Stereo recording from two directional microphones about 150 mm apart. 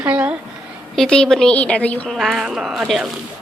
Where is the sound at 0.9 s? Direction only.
5° left (ahead or behind).